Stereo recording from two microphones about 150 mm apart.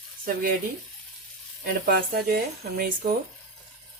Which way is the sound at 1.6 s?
80° right.